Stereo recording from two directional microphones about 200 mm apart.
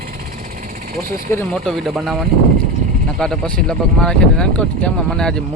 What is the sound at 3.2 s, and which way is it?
Speech, 5° left (ahead or behind).